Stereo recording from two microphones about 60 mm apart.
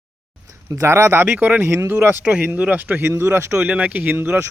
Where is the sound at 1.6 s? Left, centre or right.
Right.